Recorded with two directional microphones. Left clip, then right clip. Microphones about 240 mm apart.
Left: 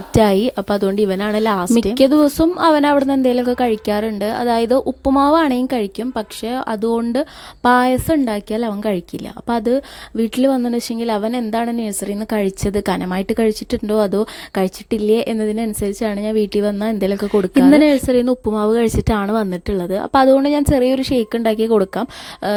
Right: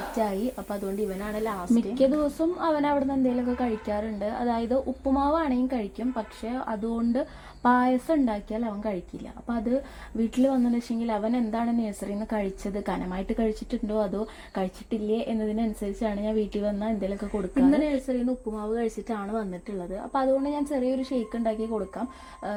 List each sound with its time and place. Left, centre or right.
0.2 s a woman's voice: left